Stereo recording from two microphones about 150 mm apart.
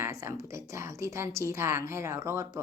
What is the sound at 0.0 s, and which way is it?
A woman's voice, 20° right (ahead or behind).